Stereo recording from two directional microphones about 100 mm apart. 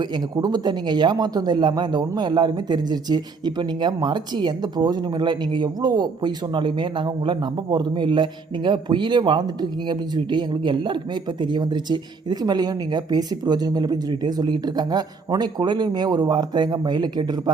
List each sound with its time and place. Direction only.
0.0 s speech: 45° right (ahead or behind)